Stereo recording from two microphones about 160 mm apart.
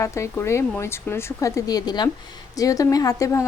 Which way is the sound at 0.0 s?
15° left (ahead or behind).